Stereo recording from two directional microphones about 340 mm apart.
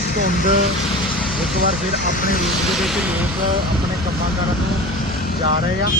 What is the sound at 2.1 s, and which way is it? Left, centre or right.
Speech, left.